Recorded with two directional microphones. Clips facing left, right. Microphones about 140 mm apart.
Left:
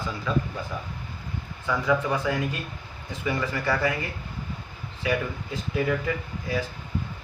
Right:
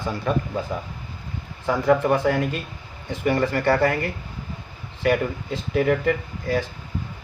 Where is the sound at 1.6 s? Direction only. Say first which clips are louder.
Right 5 dB; 55° right (ahead or behind).